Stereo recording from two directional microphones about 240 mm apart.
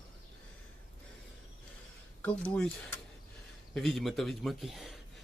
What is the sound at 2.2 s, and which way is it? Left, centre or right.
A man's voice, centre.